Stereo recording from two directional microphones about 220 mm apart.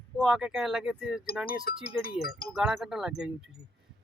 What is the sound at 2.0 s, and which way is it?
Speech, 45° left (ahead or behind).